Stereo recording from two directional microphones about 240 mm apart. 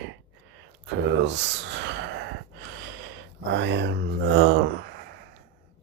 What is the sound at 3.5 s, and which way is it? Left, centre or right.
Speech, right.